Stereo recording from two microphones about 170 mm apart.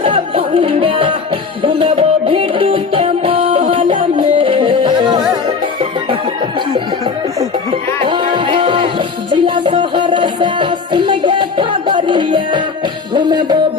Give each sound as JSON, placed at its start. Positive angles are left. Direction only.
{"t": 0.0, "sound": "music", "side_deg": -30}
{"t": 6.7, "sound": "music", "side_deg": -25}